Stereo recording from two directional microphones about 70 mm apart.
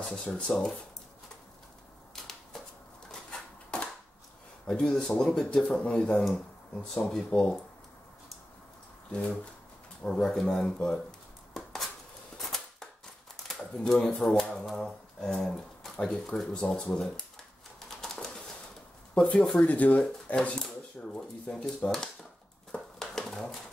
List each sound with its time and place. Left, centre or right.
0.2 s speech: centre
0.5 s speech: centre
2.5 s shuffling cards: centre
3.1 s a sound: centre
4.7 s speech: centre
9.1 s speech: centre
12.4 s typewriter: centre
13.4 s speech: centre
17.7 s bird: centre
19.1 s speech: centre
22.7 s a sound: centre